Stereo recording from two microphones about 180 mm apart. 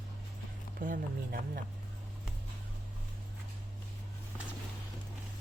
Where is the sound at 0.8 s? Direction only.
55° right (ahead or behind).